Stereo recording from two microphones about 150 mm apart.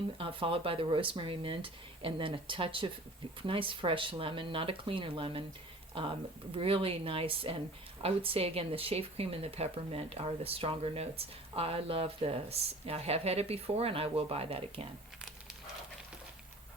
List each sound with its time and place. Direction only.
0.2 s speech: 35° right (ahead or behind)